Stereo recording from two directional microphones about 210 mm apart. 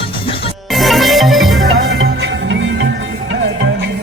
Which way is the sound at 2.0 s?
65° right (ahead or behind).